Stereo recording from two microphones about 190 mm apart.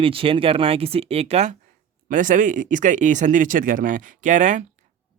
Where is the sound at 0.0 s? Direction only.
30° right (ahead or behind).